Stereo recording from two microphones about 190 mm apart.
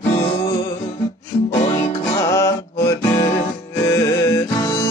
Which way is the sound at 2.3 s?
15° left (ahead or behind).